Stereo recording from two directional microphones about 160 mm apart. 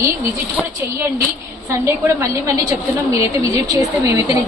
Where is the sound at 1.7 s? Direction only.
20° right (ahead or behind).